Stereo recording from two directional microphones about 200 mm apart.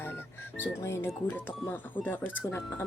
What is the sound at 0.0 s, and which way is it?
Music, 10° left (ahead or behind).